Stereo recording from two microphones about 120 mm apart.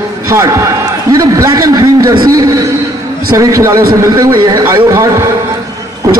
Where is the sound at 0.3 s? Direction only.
25° right (ahead or behind).